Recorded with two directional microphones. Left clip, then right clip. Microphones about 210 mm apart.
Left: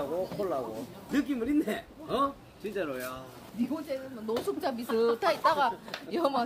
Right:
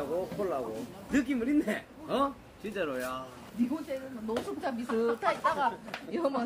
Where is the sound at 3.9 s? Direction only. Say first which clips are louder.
Left 2 dB; 50° left (ahead or behind).